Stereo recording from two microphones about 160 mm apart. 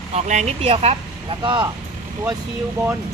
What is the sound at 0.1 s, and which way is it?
A woman's voice, 45° right (ahead or behind).